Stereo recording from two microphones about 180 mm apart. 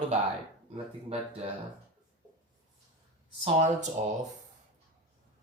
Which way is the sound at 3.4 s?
40° right (ahead or behind).